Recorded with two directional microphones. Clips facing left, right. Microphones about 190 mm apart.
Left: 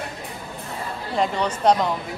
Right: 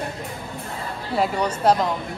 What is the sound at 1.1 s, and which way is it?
Speech, 10° right (ahead or behind).